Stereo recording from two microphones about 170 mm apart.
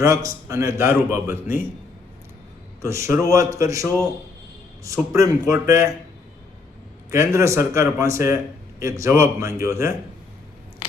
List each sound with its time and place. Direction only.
0.0 s a man's voice: 15° right (ahead or behind)
2.8 s a man's voice: 15° right (ahead or behind)
7.1 s a man's voice: 15° right (ahead or behind)